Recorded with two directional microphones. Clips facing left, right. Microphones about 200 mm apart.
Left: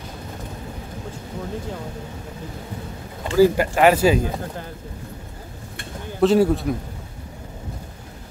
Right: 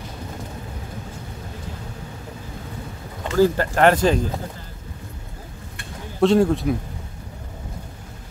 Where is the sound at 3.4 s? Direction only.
10° left (ahead or behind).